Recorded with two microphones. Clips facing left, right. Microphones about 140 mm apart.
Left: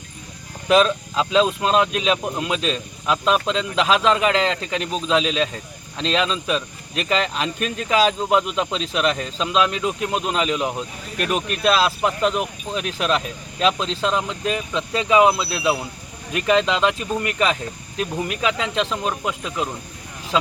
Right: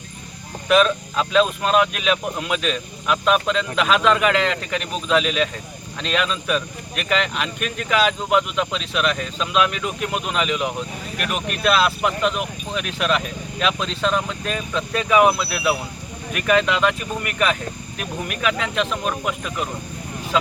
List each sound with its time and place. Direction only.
0.7 s speech: 25° left (ahead or behind)